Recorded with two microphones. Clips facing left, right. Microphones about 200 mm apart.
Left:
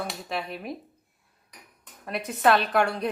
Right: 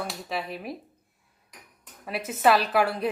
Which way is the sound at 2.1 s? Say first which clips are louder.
Even; 5° right (ahead or behind).